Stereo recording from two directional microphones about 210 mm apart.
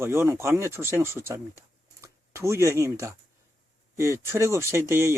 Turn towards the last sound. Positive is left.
turn(degrees=-10)  # may be behind; listen again after turning